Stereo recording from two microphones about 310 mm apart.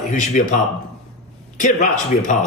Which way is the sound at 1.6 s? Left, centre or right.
Left.